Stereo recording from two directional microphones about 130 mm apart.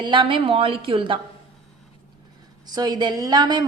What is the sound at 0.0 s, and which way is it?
A woman's voice, 40° right (ahead or behind).